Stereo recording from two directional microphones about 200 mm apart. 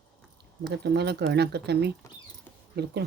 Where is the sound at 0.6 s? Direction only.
55° right (ahead or behind).